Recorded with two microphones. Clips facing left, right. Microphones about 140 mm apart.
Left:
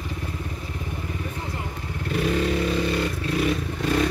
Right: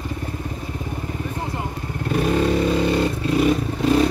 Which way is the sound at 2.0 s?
40° right (ahead or behind).